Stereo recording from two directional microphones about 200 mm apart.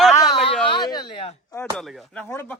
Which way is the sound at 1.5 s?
5° left (ahead or behind).